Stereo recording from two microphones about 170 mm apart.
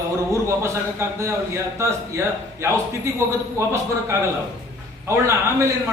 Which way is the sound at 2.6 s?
15° right (ahead or behind).